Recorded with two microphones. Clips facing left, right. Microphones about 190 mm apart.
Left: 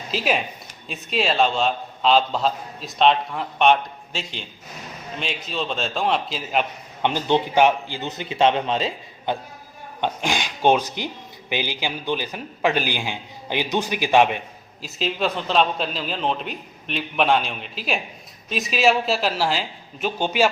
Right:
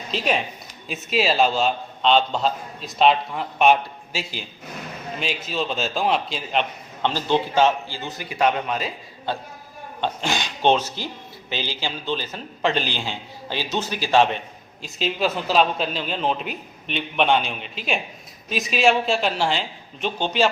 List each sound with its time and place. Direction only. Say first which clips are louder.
0.1 s a man's voice: even; centre (ahead or behind)
7.0 s a man's voice: left 1 dB; 20° left (ahead or behind)
14.8 s a man's voice: right 1 dB; centre (ahead or behind)